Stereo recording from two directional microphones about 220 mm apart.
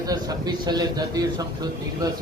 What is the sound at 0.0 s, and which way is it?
A man's voice, 15° right (ahead or behind).